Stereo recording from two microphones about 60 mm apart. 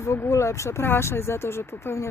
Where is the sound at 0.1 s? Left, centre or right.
Left.